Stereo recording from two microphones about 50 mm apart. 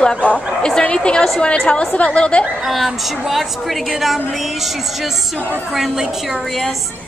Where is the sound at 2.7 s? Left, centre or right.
Centre.